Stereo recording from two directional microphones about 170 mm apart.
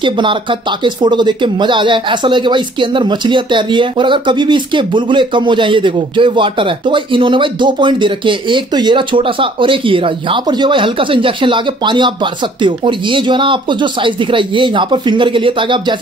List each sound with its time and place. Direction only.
0.0 s speech: 30° right (ahead or behind)